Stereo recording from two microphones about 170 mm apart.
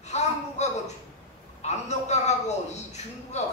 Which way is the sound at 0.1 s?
40° left (ahead or behind).